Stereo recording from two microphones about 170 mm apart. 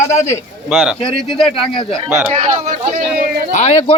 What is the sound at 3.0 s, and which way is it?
Speech, 60° right (ahead or behind).